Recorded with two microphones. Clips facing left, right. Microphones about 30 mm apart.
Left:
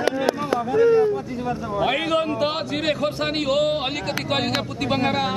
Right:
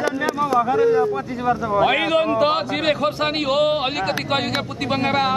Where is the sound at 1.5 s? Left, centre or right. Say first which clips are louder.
Right 5 dB; centre.